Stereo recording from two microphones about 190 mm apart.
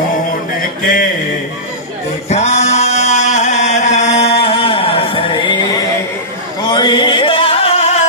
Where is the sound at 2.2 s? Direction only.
35° left (ahead or behind).